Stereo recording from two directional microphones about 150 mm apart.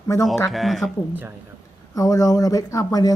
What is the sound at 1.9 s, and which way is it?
Speech, 20° left (ahead or behind).